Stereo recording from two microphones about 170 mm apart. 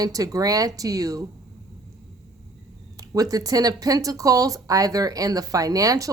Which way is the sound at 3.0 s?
20° right (ahead or behind).